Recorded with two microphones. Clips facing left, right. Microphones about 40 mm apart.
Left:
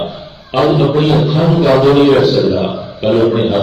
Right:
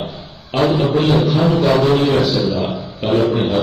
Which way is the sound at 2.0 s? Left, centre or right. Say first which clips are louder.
Left 7 dB; left.